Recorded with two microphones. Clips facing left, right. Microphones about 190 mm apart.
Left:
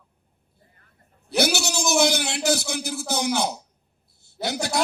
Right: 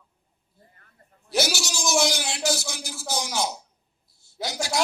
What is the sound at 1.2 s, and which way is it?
A man's voice, 60° left (ahead or behind).